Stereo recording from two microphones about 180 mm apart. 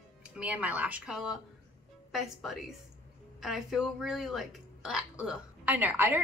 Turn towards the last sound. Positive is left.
turn(degrees=-10)  # may be behind; listen again after turning